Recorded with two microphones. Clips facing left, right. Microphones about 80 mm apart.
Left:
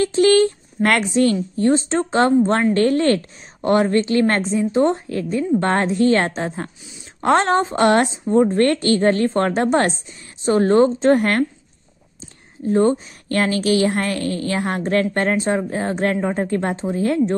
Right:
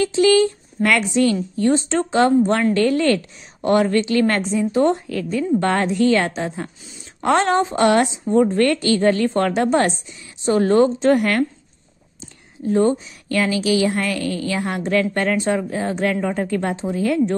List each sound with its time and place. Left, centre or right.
0.0 s a woman's voice: left
12.6 s a woman's voice: left